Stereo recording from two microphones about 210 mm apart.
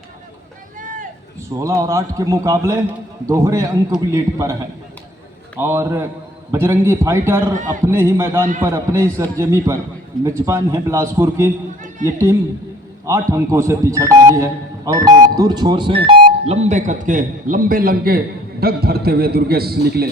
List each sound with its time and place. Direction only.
0.8 s vehicle: 40° right (ahead or behind)
1.4 s a man's voice: 15° right (ahead or behind)
5.5 s a man's voice: 10° right (ahead or behind)
7.5 s a man's voice: 35° right (ahead or behind)
7.9 s a man's voice: 10° right (ahead or behind)
13.1 s a man's voice: 15° right (ahead or behind); by 20.1 s 50° right (ahead or behind)